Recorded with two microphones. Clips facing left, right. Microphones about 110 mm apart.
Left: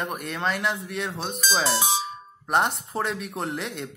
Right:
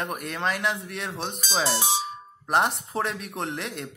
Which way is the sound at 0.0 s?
Centre (ahead or behind).